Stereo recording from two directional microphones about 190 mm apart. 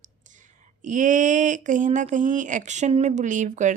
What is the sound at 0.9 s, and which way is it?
Speech, 40° right (ahead or behind).